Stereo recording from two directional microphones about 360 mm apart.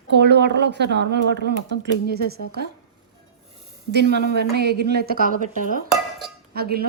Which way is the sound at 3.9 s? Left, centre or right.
Right.